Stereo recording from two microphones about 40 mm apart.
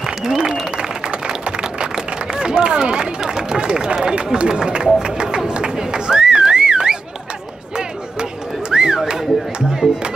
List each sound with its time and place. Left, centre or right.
0.0 s applause: centre
2.3 s speech: centre
5.0 s a sound: right
9.7 s speech: centre